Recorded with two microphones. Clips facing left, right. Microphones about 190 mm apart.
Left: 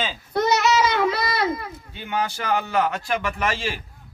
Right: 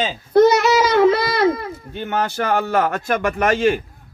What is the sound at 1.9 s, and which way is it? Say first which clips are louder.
Speech: right 4 dB; 55° right (ahead or behind).